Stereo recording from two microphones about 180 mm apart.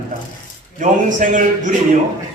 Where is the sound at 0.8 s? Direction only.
45° right (ahead or behind).